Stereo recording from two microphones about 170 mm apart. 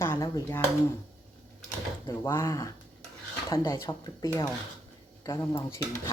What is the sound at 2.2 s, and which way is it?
Speech, 15° left (ahead or behind).